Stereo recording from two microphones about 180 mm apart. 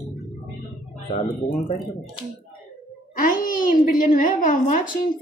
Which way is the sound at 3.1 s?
50° left (ahead or behind).